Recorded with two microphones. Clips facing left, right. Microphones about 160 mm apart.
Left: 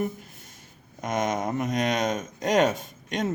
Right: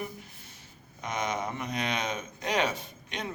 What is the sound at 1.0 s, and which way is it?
A man's voice, 45° left (ahead or behind).